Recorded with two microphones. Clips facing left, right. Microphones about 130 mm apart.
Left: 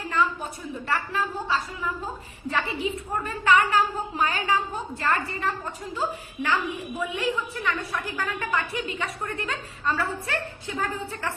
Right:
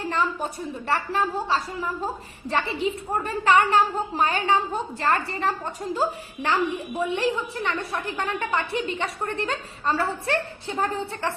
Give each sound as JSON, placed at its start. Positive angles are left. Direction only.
{"t": 0.1, "sound": "a woman's voice", "side_deg": -35}